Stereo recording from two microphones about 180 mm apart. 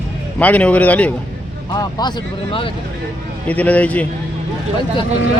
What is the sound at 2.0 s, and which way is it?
Speech, 25° left (ahead or behind).